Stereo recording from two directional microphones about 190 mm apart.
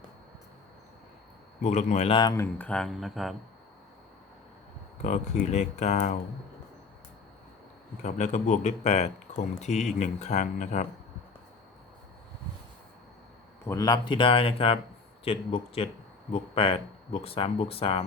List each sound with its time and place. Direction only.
1.6 s speech: 40° left (ahead or behind)
2.3 s speech: 10° left (ahead or behind)
5.0 s speech: 40° left (ahead or behind)
8.0 s speech: 40° left (ahead or behind)
13.7 s speech: 20° left (ahead or behind)